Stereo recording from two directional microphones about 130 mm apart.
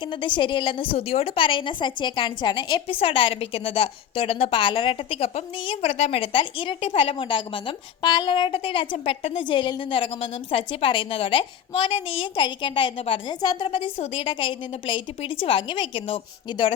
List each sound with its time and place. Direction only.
0.1 s a woman's voice: 40° left (ahead or behind)
13.7 s a woman's voice: 45° left (ahead or behind)